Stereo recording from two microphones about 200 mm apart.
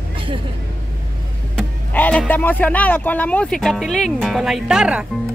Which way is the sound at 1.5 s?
5° left (ahead or behind).